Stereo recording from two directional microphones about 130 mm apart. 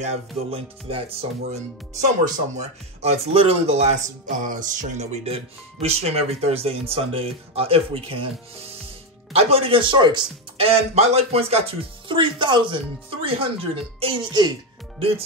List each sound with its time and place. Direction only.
0.0 s speech: 50° right (ahead or behind)
1.5 s speech: 75° right (ahead or behind); by 8.3 s 45° right (ahead or behind)
9.3 s speech: 50° right (ahead or behind)
10.7 s speech: 55° right (ahead or behind); by 14.5 s 35° right (ahead or behind)
15.0 s speech: 50° right (ahead or behind)